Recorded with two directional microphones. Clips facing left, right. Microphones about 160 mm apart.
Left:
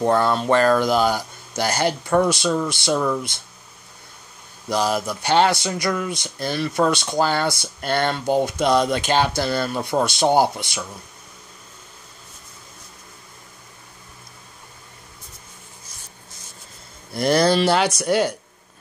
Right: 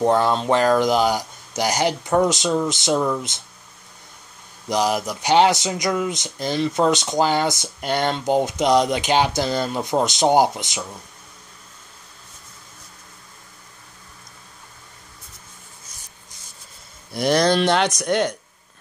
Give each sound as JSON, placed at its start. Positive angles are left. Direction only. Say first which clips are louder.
{"t": 0.0, "sound": "speech", "louder": "right 1 dB", "side_deg": -15}
{"t": 4.6, "sound": "speech", "louder": "right 1 dB", "side_deg": -15}
{"t": 17.1, "sound": "speech", "louder": "left 1 dB", "side_deg": 0}